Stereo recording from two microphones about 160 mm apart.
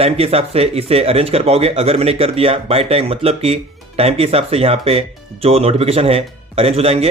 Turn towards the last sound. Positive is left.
turn(degrees=-40)  # may be behind; listen again after turning